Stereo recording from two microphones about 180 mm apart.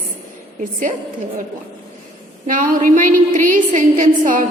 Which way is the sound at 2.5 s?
45° right (ahead or behind).